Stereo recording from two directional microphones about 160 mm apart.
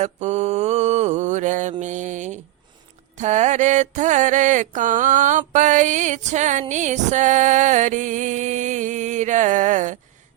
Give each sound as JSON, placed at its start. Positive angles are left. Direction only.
{"t": 0.0, "sound": "mantra", "side_deg": -45}